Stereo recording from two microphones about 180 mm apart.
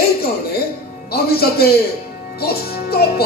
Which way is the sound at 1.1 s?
60° left (ahead or behind).